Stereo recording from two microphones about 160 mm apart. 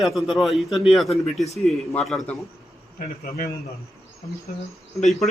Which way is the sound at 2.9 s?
65° left (ahead or behind).